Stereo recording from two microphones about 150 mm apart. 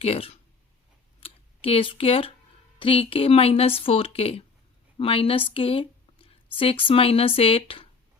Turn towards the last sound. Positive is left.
turn(degrees=35)  # may be behind; listen again after turning